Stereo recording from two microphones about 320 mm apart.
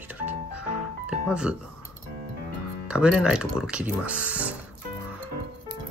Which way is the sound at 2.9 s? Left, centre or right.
Centre.